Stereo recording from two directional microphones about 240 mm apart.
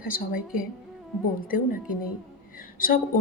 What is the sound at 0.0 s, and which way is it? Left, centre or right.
Speech, left.